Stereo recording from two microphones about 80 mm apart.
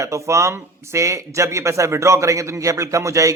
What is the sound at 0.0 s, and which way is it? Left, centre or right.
Speech, right.